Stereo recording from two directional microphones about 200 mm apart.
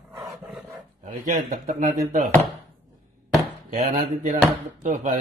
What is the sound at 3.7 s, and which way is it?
A man's voice, 40° right (ahead or behind).